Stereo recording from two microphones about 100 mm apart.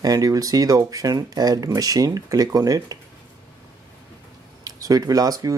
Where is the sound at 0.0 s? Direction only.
40° right (ahead or behind).